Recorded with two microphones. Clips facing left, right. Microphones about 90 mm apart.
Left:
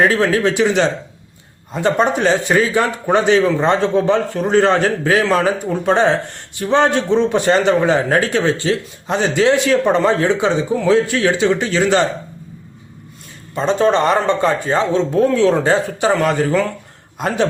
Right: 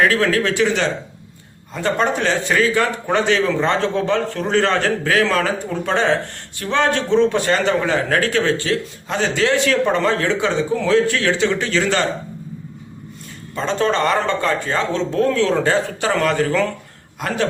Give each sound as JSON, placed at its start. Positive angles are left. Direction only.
{"t": 0.0, "sound": "a man's voice", "side_deg": 25}
{"t": 13.6, "sound": "a man's voice", "side_deg": 20}